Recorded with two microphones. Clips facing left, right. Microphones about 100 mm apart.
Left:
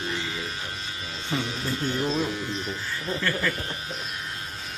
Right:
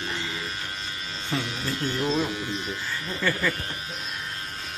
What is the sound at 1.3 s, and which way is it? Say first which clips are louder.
Speech: even; 25° left (ahead or behind).